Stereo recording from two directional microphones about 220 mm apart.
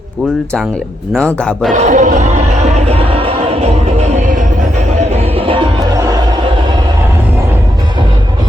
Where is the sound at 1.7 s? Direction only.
35° right (ahead or behind).